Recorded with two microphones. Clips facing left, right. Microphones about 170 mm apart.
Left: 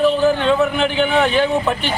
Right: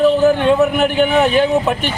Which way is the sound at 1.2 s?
15° right (ahead or behind).